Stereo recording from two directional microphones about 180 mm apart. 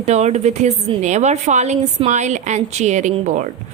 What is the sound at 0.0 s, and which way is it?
A woman's voice, 35° right (ahead or behind).